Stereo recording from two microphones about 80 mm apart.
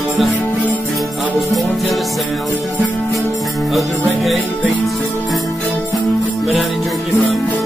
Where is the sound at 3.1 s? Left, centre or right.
Centre.